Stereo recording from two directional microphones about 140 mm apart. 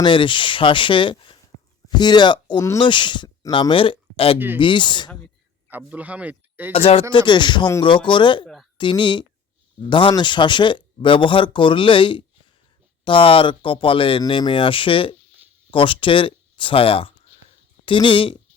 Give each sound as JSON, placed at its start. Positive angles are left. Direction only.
{"t": 0.0, "sound": "speech", "side_deg": 35}
{"t": 4.4, "sound": "speech", "side_deg": -15}
{"t": 4.6, "sound": "speech", "side_deg": 35}
{"t": 5.7, "sound": "speech", "side_deg": -10}
{"t": 6.7, "sound": "speech", "side_deg": 45}